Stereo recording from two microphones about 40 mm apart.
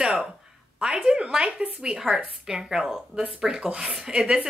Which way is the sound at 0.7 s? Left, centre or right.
Right.